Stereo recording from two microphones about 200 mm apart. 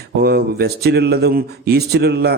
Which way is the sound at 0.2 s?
50° right (ahead or behind).